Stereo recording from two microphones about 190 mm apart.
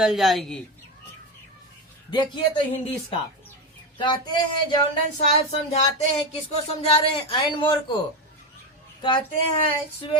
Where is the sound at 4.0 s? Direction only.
25° left (ahead or behind).